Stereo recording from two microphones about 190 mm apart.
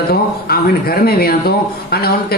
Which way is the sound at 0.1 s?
55° left (ahead or behind).